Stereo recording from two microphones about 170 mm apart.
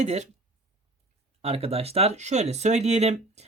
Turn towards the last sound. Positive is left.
turn(degrees=-40)  # may be behind; listen again after turning